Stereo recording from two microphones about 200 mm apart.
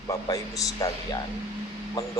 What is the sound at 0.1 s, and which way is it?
A man's voice, 15° left (ahead or behind).